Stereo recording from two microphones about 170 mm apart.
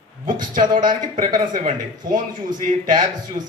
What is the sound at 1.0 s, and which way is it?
Speech, 25° right (ahead or behind).